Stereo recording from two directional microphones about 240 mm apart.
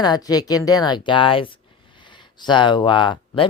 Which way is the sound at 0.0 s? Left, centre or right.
Centre.